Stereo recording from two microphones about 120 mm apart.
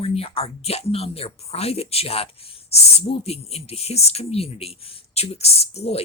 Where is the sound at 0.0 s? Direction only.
55° left (ahead or behind).